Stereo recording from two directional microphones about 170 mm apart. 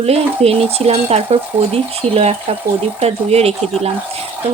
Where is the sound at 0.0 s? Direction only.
35° right (ahead or behind).